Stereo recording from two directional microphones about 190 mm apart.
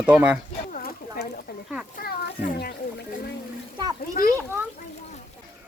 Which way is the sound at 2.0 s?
50° left (ahead or behind).